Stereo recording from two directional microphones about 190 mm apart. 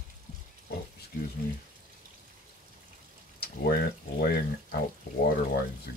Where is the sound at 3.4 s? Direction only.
55° left (ahead or behind).